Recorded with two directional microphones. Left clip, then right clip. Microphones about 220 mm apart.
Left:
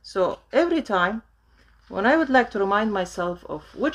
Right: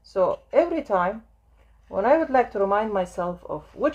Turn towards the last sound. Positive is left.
turn(degrees=40)  # may be behind; listen again after turning